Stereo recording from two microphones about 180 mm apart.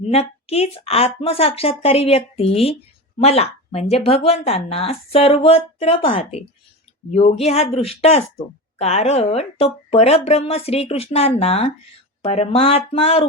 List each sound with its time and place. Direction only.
0.0 s a woman's voice: 35° left (ahead or behind)